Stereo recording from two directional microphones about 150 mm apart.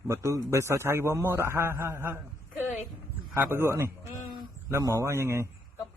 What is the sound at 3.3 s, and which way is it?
A man's voice, 15° right (ahead or behind).